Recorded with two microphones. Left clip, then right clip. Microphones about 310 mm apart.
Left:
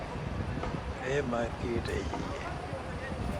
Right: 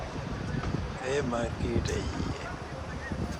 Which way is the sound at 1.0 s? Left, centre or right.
Centre.